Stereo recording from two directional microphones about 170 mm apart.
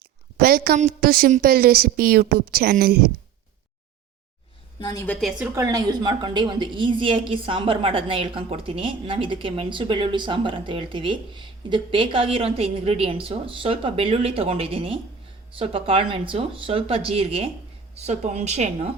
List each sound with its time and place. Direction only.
0.3 s a sound: 60° right (ahead or behind)
0.8 s a woman's voice: 60° right (ahead or behind)
4.8 s a woman's voice: 25° left (ahead or behind)
5.4 s a woman's voice: 15° right (ahead or behind); by 18.9 s 40° right (ahead or behind)